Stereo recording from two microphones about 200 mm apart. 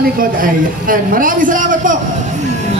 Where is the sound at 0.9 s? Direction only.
45° right (ahead or behind).